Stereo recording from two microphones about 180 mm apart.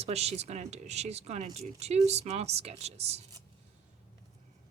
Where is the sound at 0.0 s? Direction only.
35° right (ahead or behind).